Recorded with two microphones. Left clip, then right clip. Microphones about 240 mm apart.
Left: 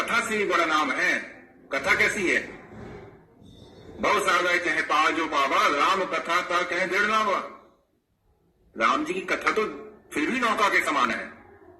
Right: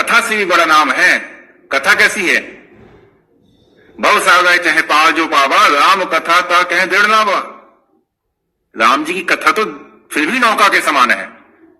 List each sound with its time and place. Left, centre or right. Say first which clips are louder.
0.1 s a man's voice: right 13 dB; right
4.0 s a man's voice: right 13 dB; right
8.7 s a man's voice: right 12 dB; right